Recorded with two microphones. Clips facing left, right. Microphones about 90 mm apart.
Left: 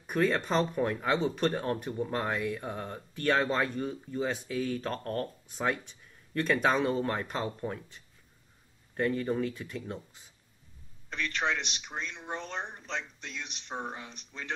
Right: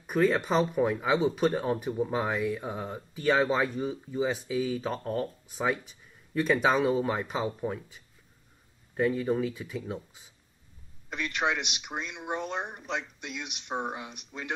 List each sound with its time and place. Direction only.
0.0 s speech: 5° right (ahead or behind)